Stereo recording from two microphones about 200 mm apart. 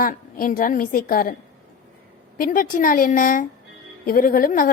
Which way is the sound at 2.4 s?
40° left (ahead or behind).